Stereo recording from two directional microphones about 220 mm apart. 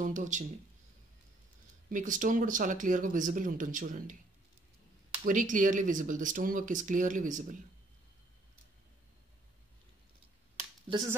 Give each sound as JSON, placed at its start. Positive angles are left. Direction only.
{"t": 0.0, "sound": "speech", "side_deg": -35}
{"t": 1.9, "sound": "speech", "side_deg": -35}
{"t": 5.2, "sound": "speech", "side_deg": -35}
{"t": 10.9, "sound": "speech", "side_deg": -20}